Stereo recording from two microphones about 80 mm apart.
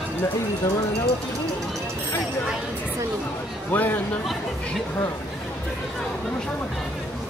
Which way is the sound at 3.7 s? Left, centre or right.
Left.